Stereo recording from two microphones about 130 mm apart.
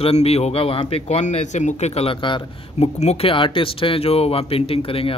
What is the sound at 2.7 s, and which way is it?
Speech, 55° left (ahead or behind).